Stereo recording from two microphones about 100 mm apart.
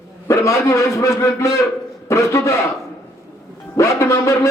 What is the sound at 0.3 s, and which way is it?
A man's voice, 30° left (ahead or behind).